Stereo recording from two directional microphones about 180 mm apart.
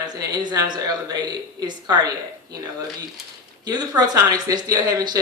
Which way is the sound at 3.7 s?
20° right (ahead or behind).